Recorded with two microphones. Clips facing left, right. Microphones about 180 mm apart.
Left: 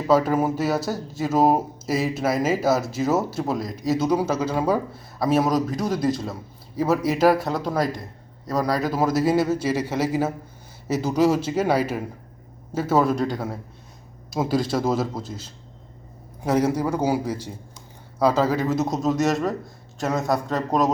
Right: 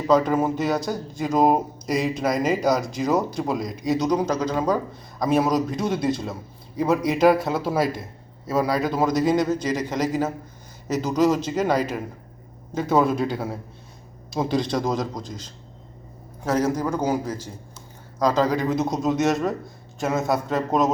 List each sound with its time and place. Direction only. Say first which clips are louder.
0.1 s a man's voice: even; 5° left (ahead or behind)